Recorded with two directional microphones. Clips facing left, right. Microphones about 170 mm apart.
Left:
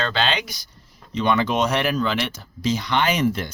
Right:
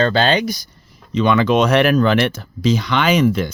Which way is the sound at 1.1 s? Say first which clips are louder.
Right 6 dB; 90° right.